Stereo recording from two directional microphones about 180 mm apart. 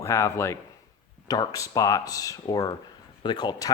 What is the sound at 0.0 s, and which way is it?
Speech, 15° left (ahead or behind).